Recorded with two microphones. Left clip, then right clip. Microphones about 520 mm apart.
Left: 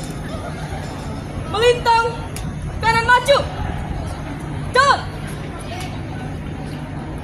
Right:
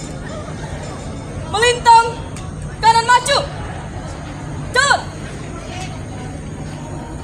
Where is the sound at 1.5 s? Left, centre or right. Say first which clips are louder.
Right 4 dB; centre.